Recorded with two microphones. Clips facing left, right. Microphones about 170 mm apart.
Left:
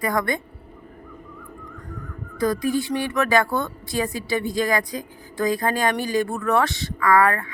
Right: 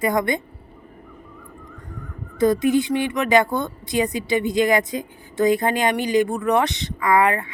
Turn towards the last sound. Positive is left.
turn(degrees=-20)  # may be behind; listen again after turning